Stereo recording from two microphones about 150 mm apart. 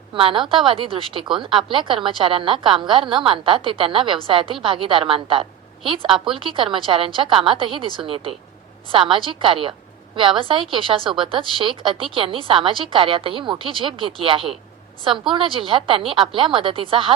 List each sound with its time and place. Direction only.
0.1 s a woman's voice: 35° right (ahead or behind)